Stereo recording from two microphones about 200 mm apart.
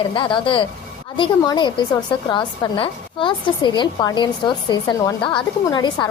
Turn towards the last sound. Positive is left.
turn(degrees=20)  # may be behind; listen again after turning